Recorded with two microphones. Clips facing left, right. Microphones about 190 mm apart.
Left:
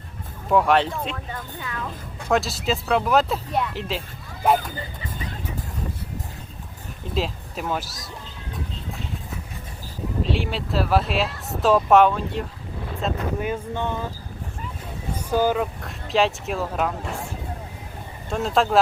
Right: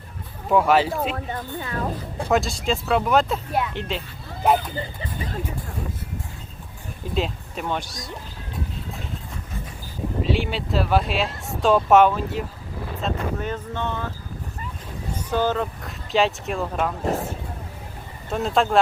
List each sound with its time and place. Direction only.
0.5 s speech: centre (ahead or behind)
1.1 s speech: 40° right (ahead or behind)
2.3 s speech: centre (ahead or behind)
7.1 s speech: centre (ahead or behind)
10.2 s speech: centre (ahead or behind)
15.3 s speech: 10° left (ahead or behind)
17.0 s speech: 35° right (ahead or behind)
18.3 s speech: centre (ahead or behind)